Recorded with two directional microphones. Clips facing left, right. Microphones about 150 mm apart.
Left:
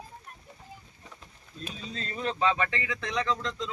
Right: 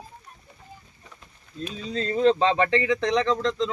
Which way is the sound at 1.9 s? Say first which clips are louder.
Right 11 dB; 30° right (ahead or behind).